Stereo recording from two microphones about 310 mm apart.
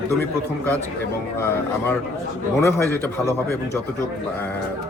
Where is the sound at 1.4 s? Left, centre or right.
Centre.